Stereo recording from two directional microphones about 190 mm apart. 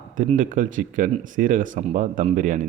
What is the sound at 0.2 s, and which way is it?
A man's voice, 45° right (ahead or behind).